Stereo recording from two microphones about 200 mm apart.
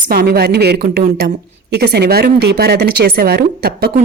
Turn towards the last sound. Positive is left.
turn(degrees=-50)  # may be behind; listen again after turning